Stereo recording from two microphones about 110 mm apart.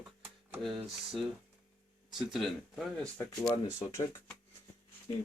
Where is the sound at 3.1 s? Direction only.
15° left (ahead or behind).